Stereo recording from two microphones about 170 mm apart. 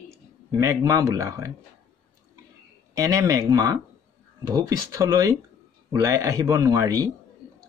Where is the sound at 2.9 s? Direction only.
20° right (ahead or behind).